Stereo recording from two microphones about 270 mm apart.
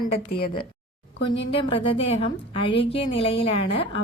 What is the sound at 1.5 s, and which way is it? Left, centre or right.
A woman's voice, centre.